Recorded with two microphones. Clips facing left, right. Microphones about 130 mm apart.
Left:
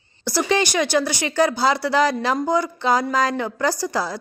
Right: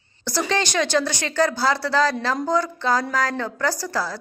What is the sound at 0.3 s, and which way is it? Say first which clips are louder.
Speech: left 3 dB; 10° left (ahead or behind).